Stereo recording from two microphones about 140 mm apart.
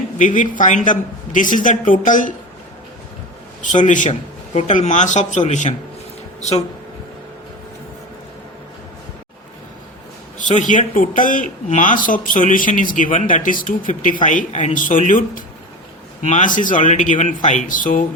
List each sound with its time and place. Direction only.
0.2 s speech: 70° left (ahead or behind)
3.6 s speech: 65° left (ahead or behind)
4.1 s speech: 50° left (ahead or behind)
10.3 s speech: 65° left (ahead or behind)